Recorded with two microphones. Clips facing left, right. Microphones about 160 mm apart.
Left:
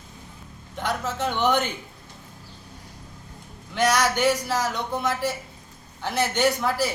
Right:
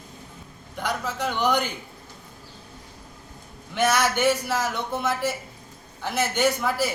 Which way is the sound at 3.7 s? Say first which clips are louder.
Even; 5° right (ahead or behind).